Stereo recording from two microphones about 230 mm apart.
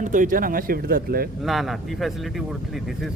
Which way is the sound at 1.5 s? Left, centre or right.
Centre.